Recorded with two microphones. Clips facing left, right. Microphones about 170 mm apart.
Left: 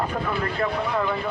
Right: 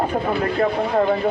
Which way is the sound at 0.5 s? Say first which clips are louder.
Right 7 dB; 40° right (ahead or behind).